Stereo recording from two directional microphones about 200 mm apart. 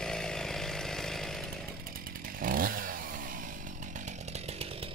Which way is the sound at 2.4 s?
45° right (ahead or behind).